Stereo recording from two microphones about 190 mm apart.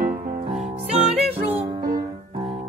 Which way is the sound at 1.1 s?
35° right (ahead or behind).